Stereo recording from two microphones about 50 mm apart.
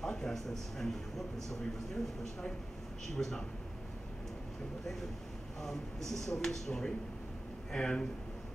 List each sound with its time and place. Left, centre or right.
0.0 s a man's voice: centre
3.2 s speech: centre
5.6 s speech: centre